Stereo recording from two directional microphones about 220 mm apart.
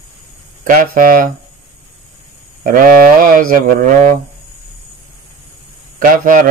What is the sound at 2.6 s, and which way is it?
Speech, 40° right (ahead or behind).